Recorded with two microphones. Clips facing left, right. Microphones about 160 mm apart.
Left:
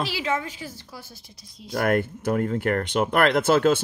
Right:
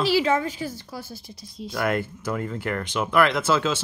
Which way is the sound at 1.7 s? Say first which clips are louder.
Left 3 dB; 55° left (ahead or behind).